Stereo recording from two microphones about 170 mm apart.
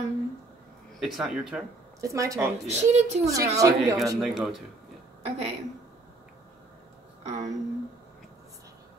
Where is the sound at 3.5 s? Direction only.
20° right (ahead or behind).